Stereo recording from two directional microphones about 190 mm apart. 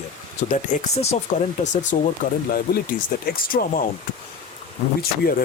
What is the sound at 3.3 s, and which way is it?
Speech, 50° left (ahead or behind).